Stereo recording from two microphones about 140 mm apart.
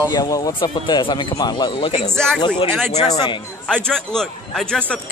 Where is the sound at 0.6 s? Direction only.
35° left (ahead or behind).